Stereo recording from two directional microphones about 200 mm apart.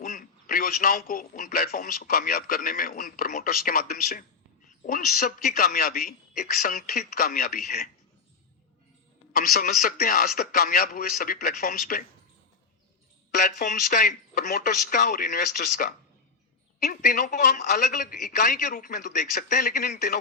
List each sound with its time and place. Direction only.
0.0 s a man's voice: 45° left (ahead or behind)
9.3 s a man's voice: 45° left (ahead or behind)
13.4 s a woman's voice: 40° left (ahead or behind)